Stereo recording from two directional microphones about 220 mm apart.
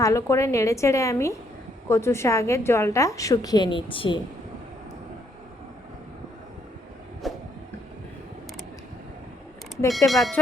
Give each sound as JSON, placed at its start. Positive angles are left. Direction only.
{"t": 0.0, "sound": "a woman's voice", "side_deg": 15}
{"t": 7.2, "sound": "vehicle", "side_deg": 0}
{"t": 10.1, "sound": "speech", "side_deg": 0}